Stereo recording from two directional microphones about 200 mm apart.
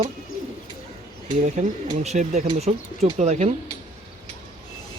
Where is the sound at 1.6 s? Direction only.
35° right (ahead or behind).